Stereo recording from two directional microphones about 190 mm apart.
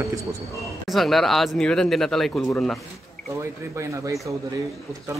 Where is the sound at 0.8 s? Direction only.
Centre (ahead or behind).